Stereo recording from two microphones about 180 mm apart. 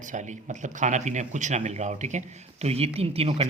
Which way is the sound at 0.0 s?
45° right (ahead or behind).